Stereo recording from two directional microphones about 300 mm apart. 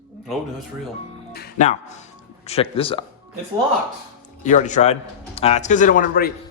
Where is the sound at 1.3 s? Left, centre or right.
Left.